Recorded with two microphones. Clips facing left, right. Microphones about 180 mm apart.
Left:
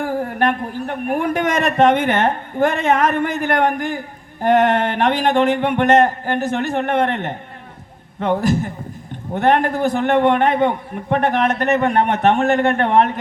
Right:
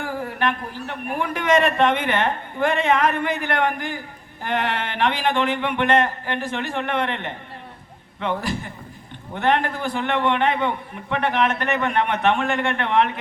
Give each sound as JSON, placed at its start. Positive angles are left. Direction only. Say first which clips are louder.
{"t": 0.0, "sound": "a man's voice", "louder": "left 6 dB", "side_deg": 45}